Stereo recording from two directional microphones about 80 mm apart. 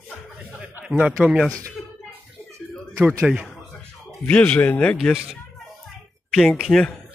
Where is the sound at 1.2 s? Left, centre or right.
Centre.